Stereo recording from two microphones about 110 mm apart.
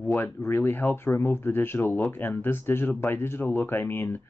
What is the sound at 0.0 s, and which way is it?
Speech, 20° left (ahead or behind).